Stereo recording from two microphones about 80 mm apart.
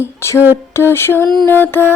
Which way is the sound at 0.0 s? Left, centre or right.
Left.